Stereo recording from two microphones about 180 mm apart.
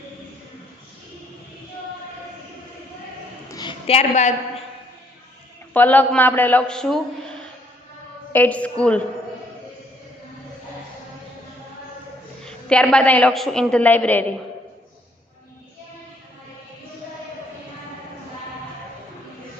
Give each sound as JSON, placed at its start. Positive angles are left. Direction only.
{"t": 3.5, "sound": "a sound", "side_deg": 25}
{"t": 5.7, "sound": "a woman's voice", "side_deg": 10}
{"t": 12.5, "sound": "a woman's voice", "side_deg": 5}